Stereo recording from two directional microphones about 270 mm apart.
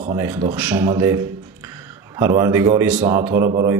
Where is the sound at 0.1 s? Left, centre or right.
Centre.